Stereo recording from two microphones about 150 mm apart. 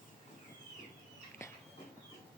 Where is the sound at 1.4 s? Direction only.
20° left (ahead or behind).